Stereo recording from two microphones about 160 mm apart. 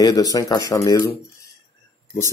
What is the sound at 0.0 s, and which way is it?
Speech, 25° left (ahead or behind).